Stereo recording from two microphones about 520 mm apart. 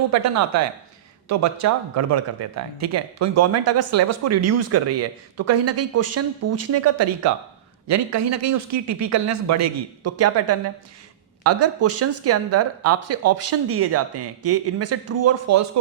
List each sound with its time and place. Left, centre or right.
0.1 s speech: right